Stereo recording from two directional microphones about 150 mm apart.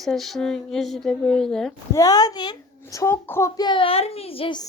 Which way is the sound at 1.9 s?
25° left (ahead or behind).